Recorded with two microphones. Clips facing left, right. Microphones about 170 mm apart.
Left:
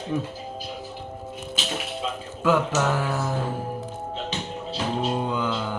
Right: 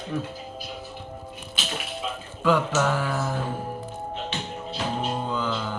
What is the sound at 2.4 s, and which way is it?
Speech, 10° left (ahead or behind).